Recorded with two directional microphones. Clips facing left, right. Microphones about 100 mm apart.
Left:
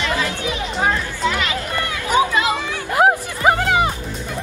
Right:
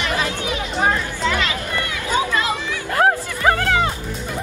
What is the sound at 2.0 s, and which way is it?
Music, 20° left (ahead or behind).